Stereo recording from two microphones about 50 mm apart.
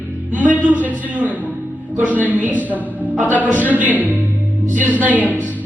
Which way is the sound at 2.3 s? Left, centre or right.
Right.